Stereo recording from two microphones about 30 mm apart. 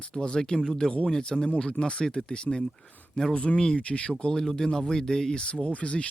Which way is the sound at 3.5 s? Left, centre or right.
Left.